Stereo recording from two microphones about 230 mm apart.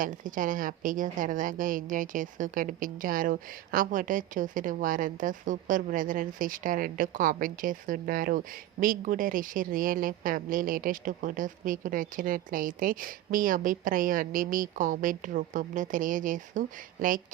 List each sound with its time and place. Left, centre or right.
0.0 s a woman's voice: right